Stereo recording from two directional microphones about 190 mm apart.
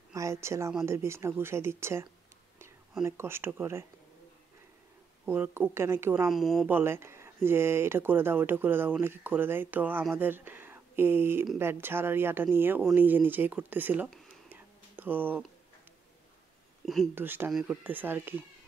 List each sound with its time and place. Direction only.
0.1 s speech: 15° right (ahead or behind)
3.1 s speech: 15° right (ahead or behind)
5.2 s speech: 10° right (ahead or behind)
6.2 s speech: centre (ahead or behind)
6.8 s speech: 15° right (ahead or behind)
16.8 s speech: centre (ahead or behind)
17.1 s speech: 10° right (ahead or behind)